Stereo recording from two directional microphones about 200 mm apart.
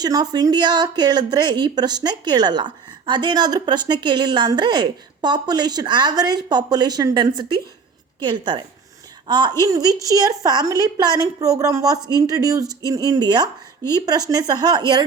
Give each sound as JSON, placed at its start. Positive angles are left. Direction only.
{"t": 0.0, "sound": "a woman's voice", "side_deg": -20}